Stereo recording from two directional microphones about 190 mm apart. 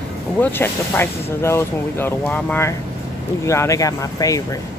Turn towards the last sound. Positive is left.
turn(degrees=20)  # may be behind; listen again after turning